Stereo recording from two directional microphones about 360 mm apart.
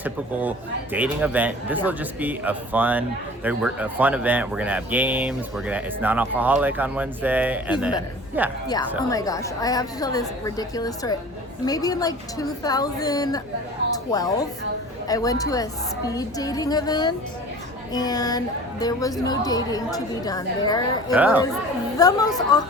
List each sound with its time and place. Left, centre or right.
0.0 s speech: centre
8.6 s a woman's voice: centre
21.2 s speech: centre
21.9 s a woman's voice: centre